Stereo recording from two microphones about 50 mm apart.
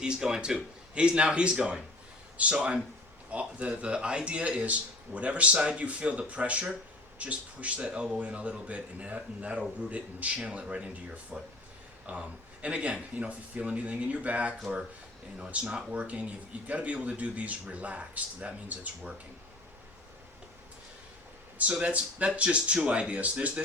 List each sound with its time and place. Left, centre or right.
0.0 s a man's voice: centre
21.7 s speech: right